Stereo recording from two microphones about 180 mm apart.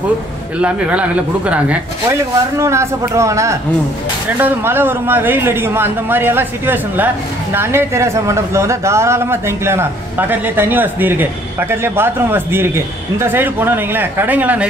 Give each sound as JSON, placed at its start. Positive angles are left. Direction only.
{"t": 0.6, "sound": "a man's voice", "side_deg": -5}